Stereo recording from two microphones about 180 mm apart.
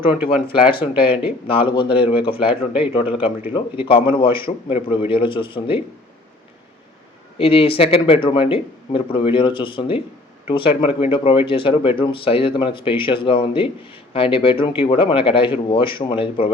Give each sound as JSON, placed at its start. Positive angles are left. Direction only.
{"t": 0.9, "sound": "speech", "side_deg": 30}
{"t": 7.3, "sound": "speech", "side_deg": 30}